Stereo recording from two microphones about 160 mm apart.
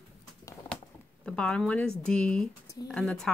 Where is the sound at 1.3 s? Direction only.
5° left (ahead or behind).